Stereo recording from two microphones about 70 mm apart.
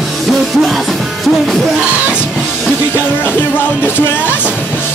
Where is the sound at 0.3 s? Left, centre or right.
Centre.